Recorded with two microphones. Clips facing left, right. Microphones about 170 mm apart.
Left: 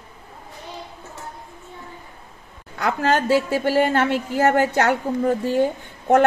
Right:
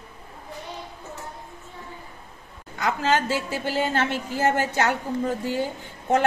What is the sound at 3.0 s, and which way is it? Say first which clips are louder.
A woman's voice: left 6 dB; 60° left (ahead or behind).